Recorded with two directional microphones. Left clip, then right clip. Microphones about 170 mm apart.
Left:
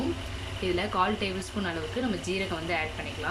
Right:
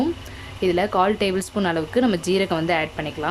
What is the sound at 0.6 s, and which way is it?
Speech, 40° right (ahead or behind).